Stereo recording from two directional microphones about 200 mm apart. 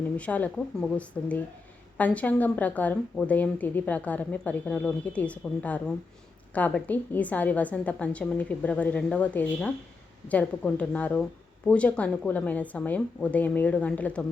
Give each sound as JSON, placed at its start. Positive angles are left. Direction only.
{"t": 0.2, "sound": "speech", "side_deg": 5}